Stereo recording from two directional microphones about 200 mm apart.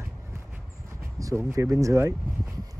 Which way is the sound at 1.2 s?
15° right (ahead or behind).